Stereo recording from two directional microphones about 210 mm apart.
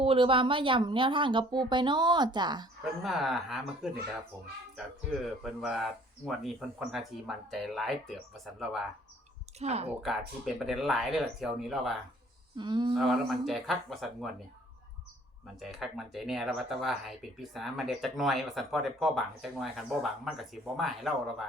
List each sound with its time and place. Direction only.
0.0 s a woman's voice: 25° right (ahead or behind)
3.0 s speech: centre (ahead or behind)
5.2 s speech: centre (ahead or behind)
9.6 s speech: 30° right (ahead or behind)
9.9 s speech: centre (ahead or behind)
12.5 s a woman's voice: 20° right (ahead or behind)
13.0 s speech: centre (ahead or behind)
15.6 s speech: centre (ahead or behind)